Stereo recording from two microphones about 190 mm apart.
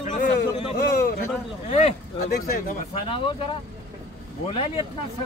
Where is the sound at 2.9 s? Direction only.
25° left (ahead or behind).